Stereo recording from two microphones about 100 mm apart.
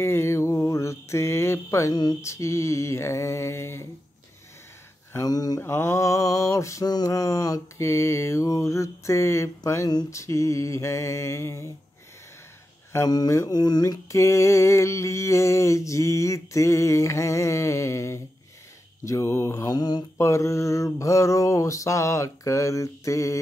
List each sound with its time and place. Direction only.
0.0 s mantra: 25° left (ahead or behind)
5.2 s mantra: 40° left (ahead or behind)
5.6 s mantra: 25° left (ahead or behind)
12.9 s mantra: 40° left (ahead or behind)
19.7 s mantra: 40° left (ahead or behind)
20.2 s mantra: 30° left (ahead or behind)